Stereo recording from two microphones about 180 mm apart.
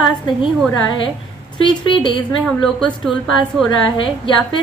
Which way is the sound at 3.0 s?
Centre (ahead or behind).